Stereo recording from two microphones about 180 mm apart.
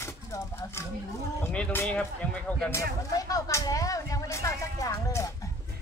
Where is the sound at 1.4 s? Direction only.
10° left (ahead or behind).